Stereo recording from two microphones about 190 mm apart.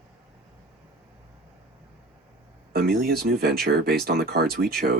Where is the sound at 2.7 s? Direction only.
55° right (ahead or behind).